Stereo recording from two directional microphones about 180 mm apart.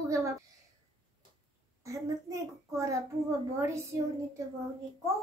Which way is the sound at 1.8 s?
15° right (ahead or behind).